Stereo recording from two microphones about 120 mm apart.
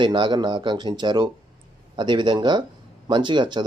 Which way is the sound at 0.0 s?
40° right (ahead or behind).